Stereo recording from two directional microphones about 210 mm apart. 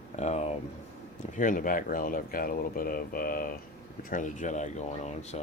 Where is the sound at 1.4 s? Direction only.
40° left (ahead or behind).